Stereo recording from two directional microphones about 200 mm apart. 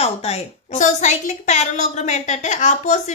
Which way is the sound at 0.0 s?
30° left (ahead or behind).